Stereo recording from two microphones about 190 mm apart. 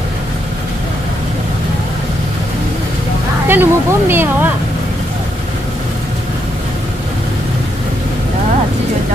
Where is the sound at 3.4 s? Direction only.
10° right (ahead or behind).